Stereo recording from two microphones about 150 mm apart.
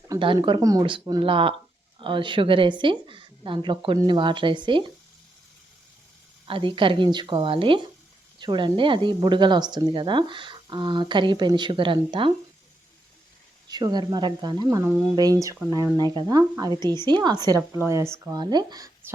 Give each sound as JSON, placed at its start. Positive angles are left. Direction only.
{"t": 0.2, "sound": "speech", "side_deg": -35}
{"t": 6.4, "sound": "speech", "side_deg": -35}
{"t": 13.7, "sound": "speech", "side_deg": -25}
{"t": 17.7, "sound": "speech", "side_deg": -15}